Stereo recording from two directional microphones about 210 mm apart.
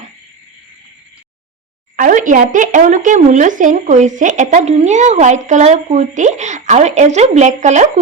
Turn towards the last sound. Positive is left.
turn(degrees=-35)  # may be behind; listen again after turning